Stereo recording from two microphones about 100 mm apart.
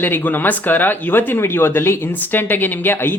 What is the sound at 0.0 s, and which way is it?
Speech, 20° left (ahead or behind).